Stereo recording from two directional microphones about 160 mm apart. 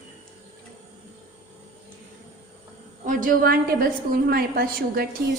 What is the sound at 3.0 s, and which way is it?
A woman's voice, 60° right (ahead or behind).